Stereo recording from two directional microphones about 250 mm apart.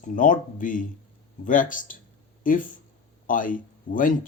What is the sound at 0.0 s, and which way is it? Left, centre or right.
Speech, left.